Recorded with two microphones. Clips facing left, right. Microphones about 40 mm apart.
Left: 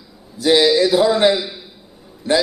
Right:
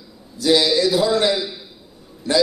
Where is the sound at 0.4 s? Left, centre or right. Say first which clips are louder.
Left 3 dB; centre.